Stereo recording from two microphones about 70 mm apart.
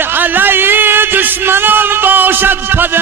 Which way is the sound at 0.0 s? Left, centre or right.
Right.